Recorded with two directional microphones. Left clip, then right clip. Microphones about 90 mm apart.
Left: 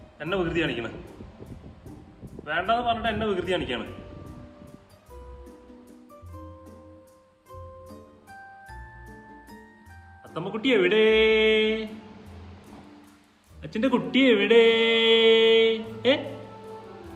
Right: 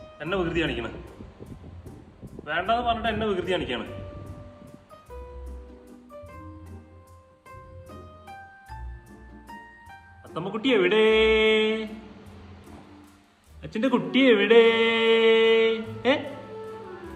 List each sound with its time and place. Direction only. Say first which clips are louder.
0.2 s a man's voice: even; 35° left (ahead or behind)
2.4 s a man's voice: even; 35° left (ahead or behind)
3.8 s music: right 2 dB; 30° left (ahead or behind)
10.3 s a man's voice: even; 35° left (ahead or behind)
13.6 s speech: even; 30° left (ahead or behind)